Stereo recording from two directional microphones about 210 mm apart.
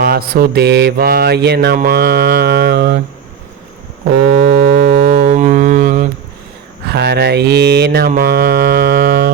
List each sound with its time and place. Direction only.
0.0 s mantra: 45° right (ahead or behind)
4.1 s a sound: 45° right (ahead or behind)
6.8 s mantra: 55° right (ahead or behind)